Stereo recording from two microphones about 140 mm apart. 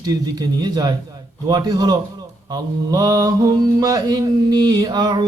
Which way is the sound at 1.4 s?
30° right (ahead or behind).